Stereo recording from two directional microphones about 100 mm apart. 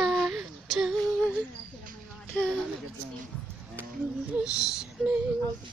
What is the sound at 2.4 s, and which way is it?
Speech, 10° left (ahead or behind).